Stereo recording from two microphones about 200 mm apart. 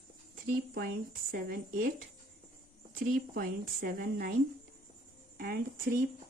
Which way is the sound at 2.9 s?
45° right (ahead or behind).